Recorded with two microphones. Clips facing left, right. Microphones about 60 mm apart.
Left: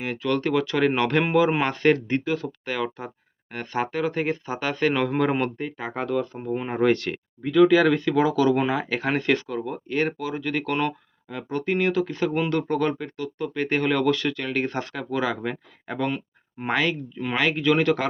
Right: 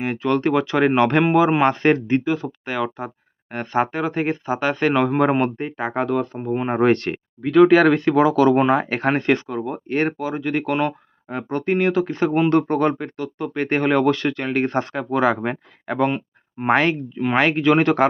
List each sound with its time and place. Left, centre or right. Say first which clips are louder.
0.0 s speech: right 5 dB; right
7.4 s speech: right 4 dB; right
9.9 s speech: right 4 dB; right; by 10.9 s centre
11.3 s speech: right 4 dB; right